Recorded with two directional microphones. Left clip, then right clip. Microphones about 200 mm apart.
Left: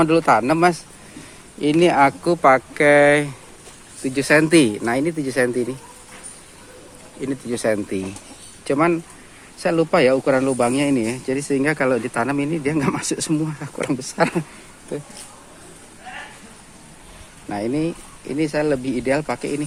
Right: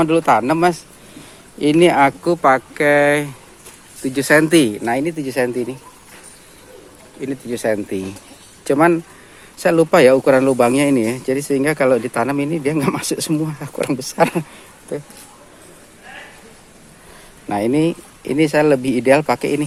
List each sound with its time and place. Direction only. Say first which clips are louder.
0.0 s speech: right 1 dB; 5° right (ahead or behind)
1.8 s speech: right 2 dB; 10° right (ahead or behind)
4.0 s speech: right 3 dB; 10° right (ahead or behind)
7.2 s speech: right 1 dB; centre (ahead or behind)
8.6 s speech: right 5 dB; 20° right (ahead or behind)
17.5 s speech: right 6 dB; 35° right (ahead or behind)